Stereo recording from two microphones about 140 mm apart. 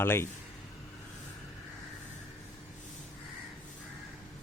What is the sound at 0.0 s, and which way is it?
Speech, 15° left (ahead or behind).